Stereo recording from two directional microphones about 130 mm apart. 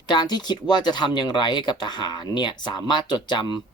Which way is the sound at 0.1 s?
35° left (ahead or behind).